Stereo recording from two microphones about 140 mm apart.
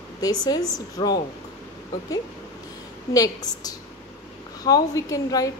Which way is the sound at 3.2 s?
25° left (ahead or behind).